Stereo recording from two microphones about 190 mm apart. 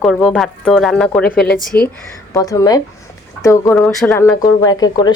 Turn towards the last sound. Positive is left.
turn(degrees=20)  # may be behind; listen again after turning